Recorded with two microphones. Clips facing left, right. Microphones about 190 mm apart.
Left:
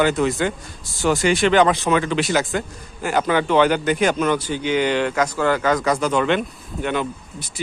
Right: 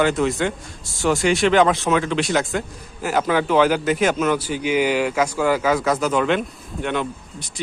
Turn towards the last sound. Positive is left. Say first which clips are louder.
# left 1 dB
turn(degrees=0)  # may be behind; listen again after turning